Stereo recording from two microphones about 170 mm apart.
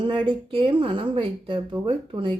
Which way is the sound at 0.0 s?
30° right (ahead or behind).